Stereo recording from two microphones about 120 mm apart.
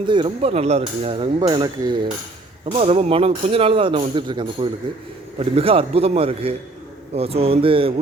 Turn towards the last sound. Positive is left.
turn(degrees=-50)  # may be behind; listen again after turning